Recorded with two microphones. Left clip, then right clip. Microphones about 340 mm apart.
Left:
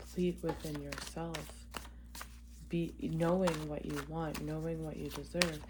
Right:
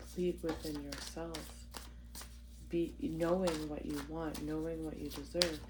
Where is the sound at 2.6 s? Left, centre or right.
Left.